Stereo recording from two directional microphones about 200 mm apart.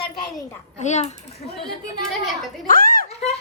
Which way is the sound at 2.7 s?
45° left (ahead or behind).